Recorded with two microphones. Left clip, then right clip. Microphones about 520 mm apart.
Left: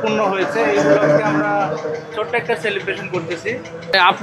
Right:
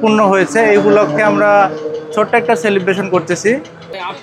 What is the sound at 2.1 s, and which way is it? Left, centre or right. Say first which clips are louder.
Speech: right 9 dB; right.